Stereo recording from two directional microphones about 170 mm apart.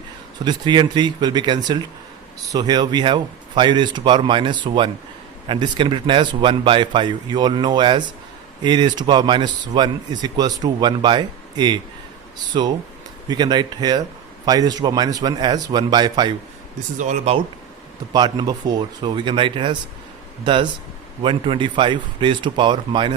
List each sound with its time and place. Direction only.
0.4 s speech: 25° right (ahead or behind)
17.0 s speech: 45° right (ahead or behind)
18.1 s speech: 25° right (ahead or behind)